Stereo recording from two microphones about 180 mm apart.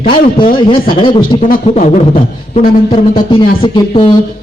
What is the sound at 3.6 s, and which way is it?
Speech, 30° left (ahead or behind).